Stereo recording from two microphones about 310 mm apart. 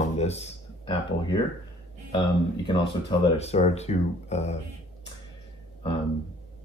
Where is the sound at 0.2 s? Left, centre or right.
Left.